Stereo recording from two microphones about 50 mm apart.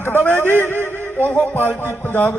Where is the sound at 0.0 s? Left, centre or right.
Left.